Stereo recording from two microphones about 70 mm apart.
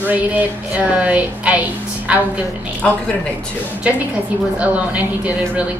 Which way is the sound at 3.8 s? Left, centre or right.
Centre.